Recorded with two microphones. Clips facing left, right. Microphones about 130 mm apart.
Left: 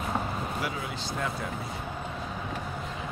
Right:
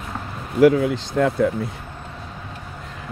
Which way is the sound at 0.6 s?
90° right.